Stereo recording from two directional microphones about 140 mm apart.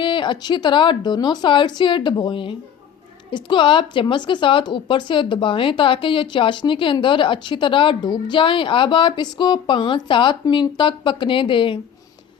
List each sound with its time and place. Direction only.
0.0 s speech: 35° left (ahead or behind)